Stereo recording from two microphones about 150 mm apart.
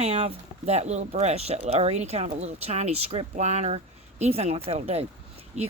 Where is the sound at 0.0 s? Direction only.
45° right (ahead or behind).